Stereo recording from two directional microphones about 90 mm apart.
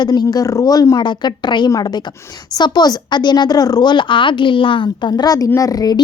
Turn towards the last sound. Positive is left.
turn(degrees=45)  # may be behind; listen again after turning